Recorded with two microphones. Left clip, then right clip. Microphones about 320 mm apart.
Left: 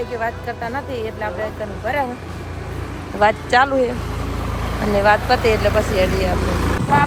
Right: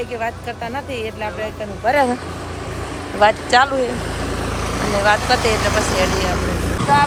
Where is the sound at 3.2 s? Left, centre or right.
Centre.